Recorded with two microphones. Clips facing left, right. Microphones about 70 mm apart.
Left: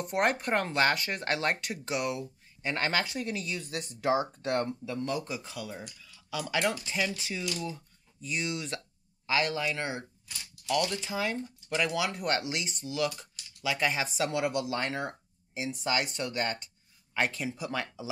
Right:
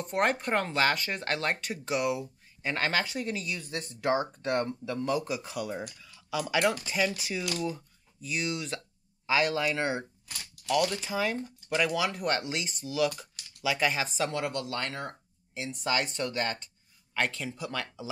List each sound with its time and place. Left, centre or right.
0.0 s speech: centre
3.4 s speech: centre
10.2 s a sound: right
10.7 s speech: centre